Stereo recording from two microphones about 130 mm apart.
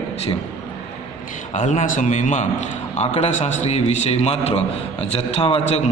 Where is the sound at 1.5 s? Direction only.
70° left (ahead or behind).